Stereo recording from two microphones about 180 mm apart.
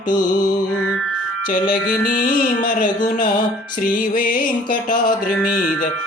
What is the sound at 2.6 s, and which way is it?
Music, 50° left (ahead or behind).